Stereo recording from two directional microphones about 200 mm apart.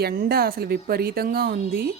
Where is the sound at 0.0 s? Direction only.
50° right (ahead or behind).